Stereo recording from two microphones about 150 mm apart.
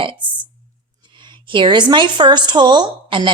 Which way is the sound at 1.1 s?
30° right (ahead or behind).